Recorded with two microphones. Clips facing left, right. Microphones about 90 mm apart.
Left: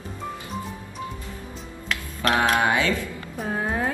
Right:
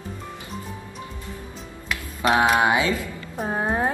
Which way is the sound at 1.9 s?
15° right (ahead or behind).